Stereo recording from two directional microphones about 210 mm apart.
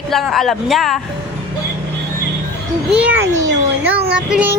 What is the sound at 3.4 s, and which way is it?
Speech, 60° right (ahead or behind).